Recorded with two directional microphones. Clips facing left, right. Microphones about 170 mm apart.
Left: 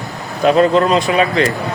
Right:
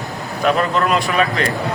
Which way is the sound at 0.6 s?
30° left (ahead or behind).